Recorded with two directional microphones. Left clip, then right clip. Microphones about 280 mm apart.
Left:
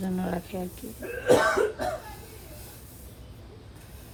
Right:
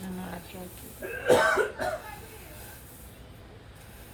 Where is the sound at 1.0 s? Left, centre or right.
Right.